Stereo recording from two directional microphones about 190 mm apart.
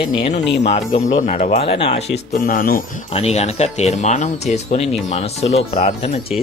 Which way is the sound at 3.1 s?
35° left (ahead or behind).